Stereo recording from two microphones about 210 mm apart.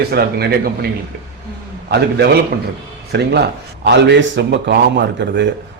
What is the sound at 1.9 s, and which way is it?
A man's voice, 50° right (ahead or behind).